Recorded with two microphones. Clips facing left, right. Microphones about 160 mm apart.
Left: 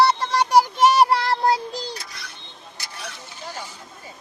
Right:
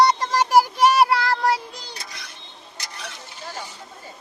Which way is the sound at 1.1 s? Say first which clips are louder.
Left 1 dB; 25° left (ahead or behind).